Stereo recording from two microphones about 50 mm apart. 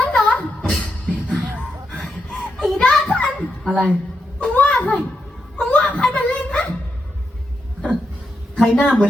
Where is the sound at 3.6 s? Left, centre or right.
Centre.